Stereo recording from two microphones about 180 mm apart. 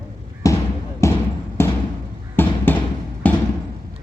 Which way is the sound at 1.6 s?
15° left (ahead or behind).